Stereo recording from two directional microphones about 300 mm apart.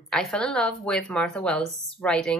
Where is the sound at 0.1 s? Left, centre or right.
Centre.